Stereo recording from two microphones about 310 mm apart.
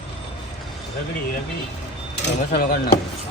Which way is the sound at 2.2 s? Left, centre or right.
Left.